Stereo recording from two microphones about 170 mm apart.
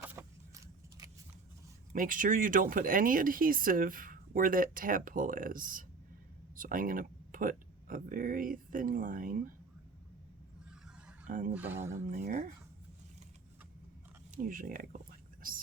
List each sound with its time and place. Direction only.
0.0 s vehicle: 10° right (ahead or behind)
1.9 s speech: 55° right (ahead or behind)
11.3 s speech: 50° right (ahead or behind)
11.5 s speech: 10° right (ahead or behind)
11.9 s speech: 50° right (ahead or behind)
14.3 s speech: 55° right (ahead or behind)